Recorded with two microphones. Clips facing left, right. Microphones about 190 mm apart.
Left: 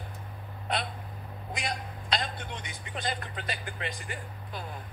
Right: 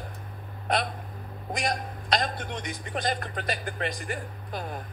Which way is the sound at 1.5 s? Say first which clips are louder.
Right 6 dB; 40° right (ahead or behind).